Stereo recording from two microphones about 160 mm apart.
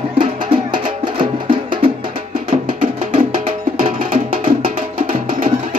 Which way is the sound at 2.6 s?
55° right (ahead or behind).